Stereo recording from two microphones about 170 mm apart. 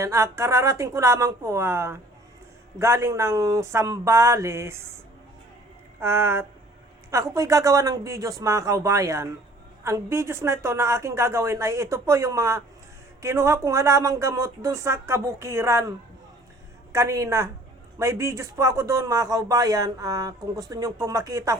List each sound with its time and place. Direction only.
0.0 s speech: 15° right (ahead or behind)
6.0 s speech: 15° right (ahead or behind)